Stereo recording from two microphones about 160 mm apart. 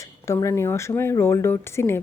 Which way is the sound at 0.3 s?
20° left (ahead or behind).